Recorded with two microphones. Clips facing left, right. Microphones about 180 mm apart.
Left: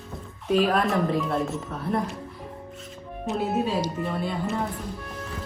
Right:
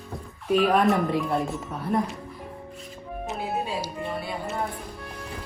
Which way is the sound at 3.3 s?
Centre (ahead or behind).